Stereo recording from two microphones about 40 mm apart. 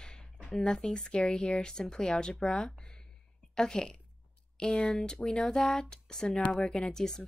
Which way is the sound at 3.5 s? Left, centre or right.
Centre.